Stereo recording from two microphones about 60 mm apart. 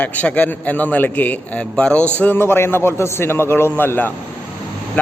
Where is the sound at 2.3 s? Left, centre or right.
Left.